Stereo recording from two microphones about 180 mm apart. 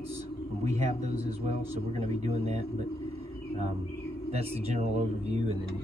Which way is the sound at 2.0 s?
35° right (ahead or behind).